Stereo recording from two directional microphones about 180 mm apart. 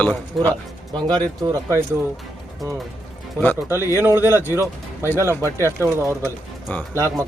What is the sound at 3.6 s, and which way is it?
Speech, 15° right (ahead or behind).